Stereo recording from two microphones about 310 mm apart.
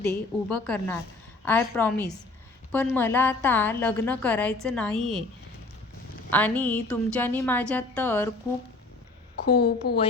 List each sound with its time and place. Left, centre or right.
0.0 s a woman's voice: centre
6.3 s a woman's voice: centre
9.3 s a woman's voice: left